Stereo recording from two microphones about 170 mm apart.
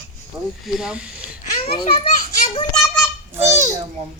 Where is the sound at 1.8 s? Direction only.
35° left (ahead or behind).